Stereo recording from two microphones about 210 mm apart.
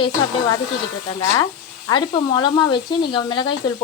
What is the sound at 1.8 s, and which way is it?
Speech, 20° left (ahead or behind).